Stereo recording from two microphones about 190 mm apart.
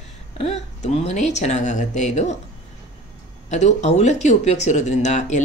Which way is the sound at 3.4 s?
35° left (ahead or behind).